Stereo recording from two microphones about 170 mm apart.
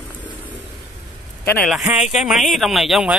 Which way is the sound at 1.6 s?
Centre (ahead or behind).